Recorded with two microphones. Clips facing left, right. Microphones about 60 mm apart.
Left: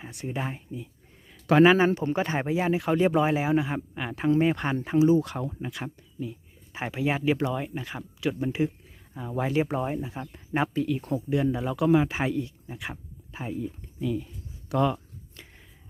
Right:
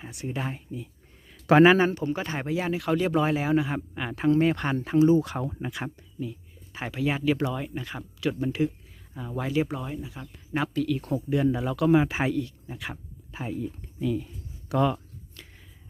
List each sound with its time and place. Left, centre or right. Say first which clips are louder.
0.0 s speech: even; centre
1.5 s speech: right 2 dB; centre
1.9 s speech: left 3 dB; left; by 5.2 s centre
5.2 s speech: right 1 dB; centre
6.7 s speech: left 1 dB; centre
9.6 s speech: left 1 dB; left
11.1 s speech: right 2 dB; centre
11.9 s speech: right 1 dB; centre
12.3 s speech: right 1 dB; centre
15.4 s a sound: even; left